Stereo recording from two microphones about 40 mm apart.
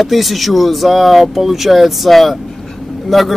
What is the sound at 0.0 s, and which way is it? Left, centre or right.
Speech, centre.